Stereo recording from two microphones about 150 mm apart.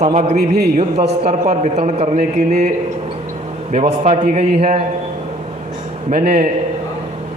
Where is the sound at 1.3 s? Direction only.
50° right (ahead or behind).